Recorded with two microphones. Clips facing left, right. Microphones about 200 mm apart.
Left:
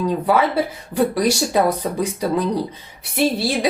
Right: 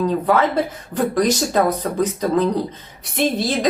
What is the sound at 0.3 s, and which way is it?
A woman's voice, 10° left (ahead or behind).